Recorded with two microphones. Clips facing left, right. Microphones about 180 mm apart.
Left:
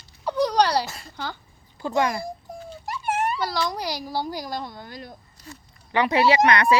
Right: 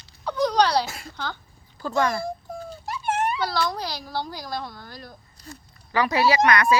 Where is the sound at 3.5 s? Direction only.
15° left (ahead or behind).